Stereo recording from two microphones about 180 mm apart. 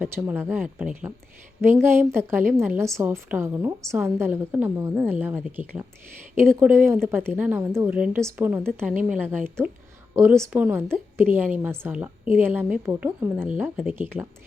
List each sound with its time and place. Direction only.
0.0 s a woman's voice: 10° right (ahead or behind)